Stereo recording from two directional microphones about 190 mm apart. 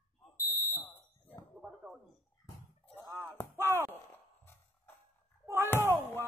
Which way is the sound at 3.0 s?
15° right (ahead or behind).